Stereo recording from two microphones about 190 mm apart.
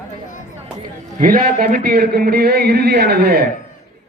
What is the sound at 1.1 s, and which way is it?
A man's voice, 50° right (ahead or behind).